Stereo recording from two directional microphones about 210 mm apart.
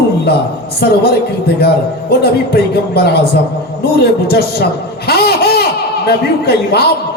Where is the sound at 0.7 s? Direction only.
50° left (ahead or behind).